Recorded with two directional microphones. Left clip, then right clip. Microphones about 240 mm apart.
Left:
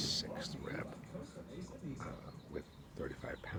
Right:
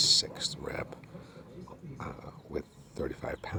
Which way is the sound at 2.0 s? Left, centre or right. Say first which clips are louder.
Right 6 dB; right.